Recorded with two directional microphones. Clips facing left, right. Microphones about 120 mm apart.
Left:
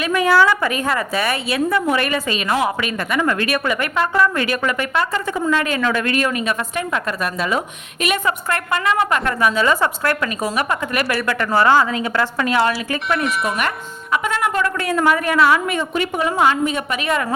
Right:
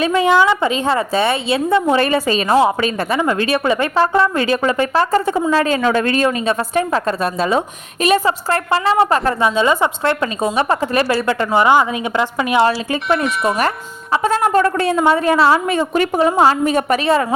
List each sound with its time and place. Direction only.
0.0 s a woman's voice: 25° right (ahead or behind)
12.6 s a woman's voice: 30° right (ahead or behind)
13.2 s speech: centre (ahead or behind)
13.6 s a woman's voice: 35° right (ahead or behind)